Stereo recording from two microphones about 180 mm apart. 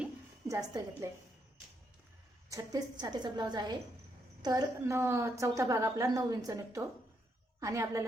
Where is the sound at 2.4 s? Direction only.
20° right (ahead or behind).